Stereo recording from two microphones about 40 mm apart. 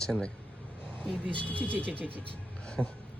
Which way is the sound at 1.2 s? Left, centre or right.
Left.